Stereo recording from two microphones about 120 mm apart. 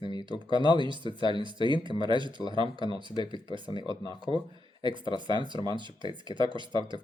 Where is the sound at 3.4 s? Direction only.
40° right (ahead or behind).